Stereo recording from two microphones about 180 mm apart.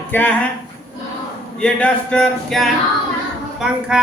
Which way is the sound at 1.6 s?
5° left (ahead or behind).